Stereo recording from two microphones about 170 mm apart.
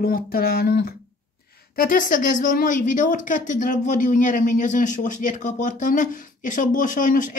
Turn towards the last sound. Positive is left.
turn(degrees=50)  # may be behind; listen again after turning